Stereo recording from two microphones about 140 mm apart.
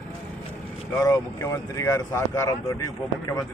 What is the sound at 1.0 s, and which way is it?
Speech, 25° left (ahead or behind).